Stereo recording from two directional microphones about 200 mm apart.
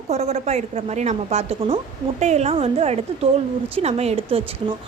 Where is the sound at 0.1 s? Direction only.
30° right (ahead or behind).